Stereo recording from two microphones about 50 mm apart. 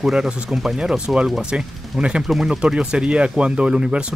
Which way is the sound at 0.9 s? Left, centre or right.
Centre.